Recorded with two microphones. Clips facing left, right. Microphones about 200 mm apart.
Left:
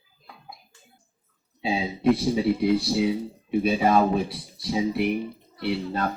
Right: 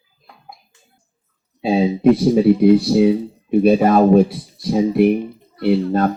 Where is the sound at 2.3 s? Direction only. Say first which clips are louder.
Right 10 dB; 50° right (ahead or behind).